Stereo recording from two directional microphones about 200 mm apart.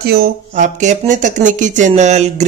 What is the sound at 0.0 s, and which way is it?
A woman's voice, 50° right (ahead or behind).